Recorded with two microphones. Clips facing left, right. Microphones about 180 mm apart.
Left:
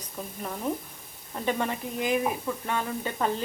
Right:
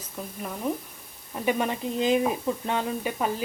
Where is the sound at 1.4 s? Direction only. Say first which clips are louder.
Right 3 dB; 20° right (ahead or behind).